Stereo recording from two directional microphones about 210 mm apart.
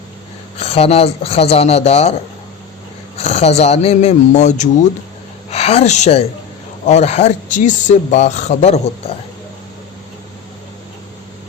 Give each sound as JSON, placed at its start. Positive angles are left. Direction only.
{"t": 0.5, "sound": "speech", "side_deg": 30}
{"t": 3.2, "sound": "a woman's voice", "side_deg": 30}